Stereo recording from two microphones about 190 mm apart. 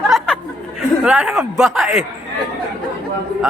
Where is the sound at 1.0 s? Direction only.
5° right (ahead or behind).